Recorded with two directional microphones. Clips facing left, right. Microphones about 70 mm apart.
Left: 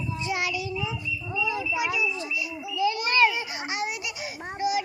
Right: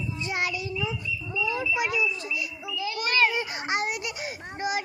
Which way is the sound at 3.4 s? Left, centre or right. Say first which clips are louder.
Right 2 dB; right.